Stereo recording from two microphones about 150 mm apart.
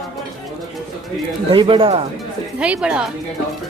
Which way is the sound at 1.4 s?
35° right (ahead or behind).